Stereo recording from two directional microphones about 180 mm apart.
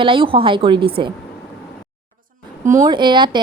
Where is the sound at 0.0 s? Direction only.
30° right (ahead or behind).